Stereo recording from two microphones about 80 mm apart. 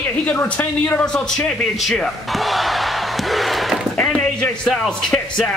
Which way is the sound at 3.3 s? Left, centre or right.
Centre.